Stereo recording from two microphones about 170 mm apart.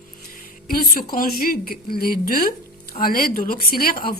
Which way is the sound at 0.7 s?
60° left (ahead or behind).